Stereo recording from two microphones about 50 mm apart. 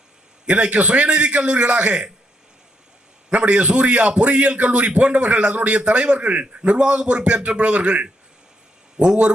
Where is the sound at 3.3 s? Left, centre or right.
Right.